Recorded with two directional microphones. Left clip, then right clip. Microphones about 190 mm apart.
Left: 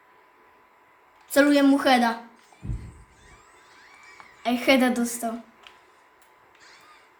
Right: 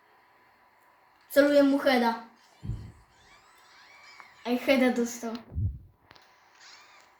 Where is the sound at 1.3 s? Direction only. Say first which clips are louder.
Left 2 dB; 55° left (ahead or behind).